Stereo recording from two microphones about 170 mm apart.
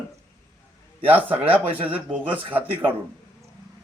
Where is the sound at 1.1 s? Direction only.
10° right (ahead or behind).